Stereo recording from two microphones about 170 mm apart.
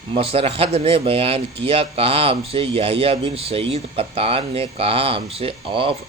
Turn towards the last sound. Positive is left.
turn(degrees=-30)  # may be behind; listen again after turning